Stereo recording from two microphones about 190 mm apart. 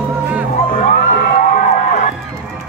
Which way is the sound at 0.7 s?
45° left (ahead or behind).